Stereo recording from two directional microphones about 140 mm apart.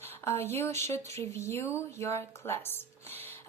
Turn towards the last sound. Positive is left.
turn(degrees=15)  # may be behind; listen again after turning